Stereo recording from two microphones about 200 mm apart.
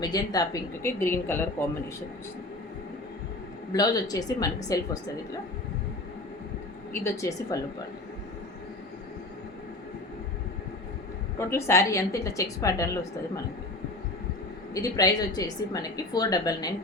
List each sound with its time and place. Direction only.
0.0 s a woman's voice: 20° left (ahead or behind)
3.7 s a woman's voice: 20° left (ahead or behind)
6.9 s a woman's voice: 15° left (ahead or behind)
11.3 s a woman's voice: 15° left (ahead or behind)
14.7 s a woman's voice: 20° left (ahead or behind)